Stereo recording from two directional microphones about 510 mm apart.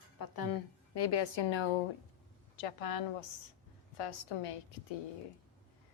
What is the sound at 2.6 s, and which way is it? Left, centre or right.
Speech, left.